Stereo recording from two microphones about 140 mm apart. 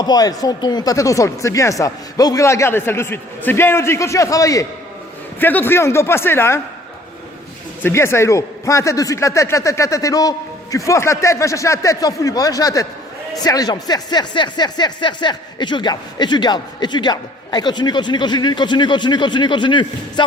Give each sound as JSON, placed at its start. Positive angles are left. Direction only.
{"t": 0.0, "sound": "a man's voice", "side_deg": 30}
{"t": 5.4, "sound": "a man's voice", "side_deg": 15}
{"t": 7.9, "sound": "a man's voice", "side_deg": 20}